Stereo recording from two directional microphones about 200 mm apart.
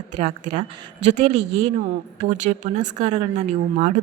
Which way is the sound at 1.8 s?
40° right (ahead or behind).